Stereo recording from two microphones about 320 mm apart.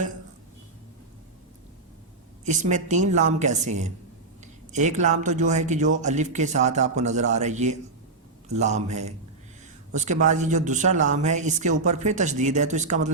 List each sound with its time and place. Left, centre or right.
2.4 s speech: right